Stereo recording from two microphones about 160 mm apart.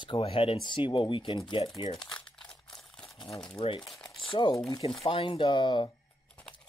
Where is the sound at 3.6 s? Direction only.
35° left (ahead or behind).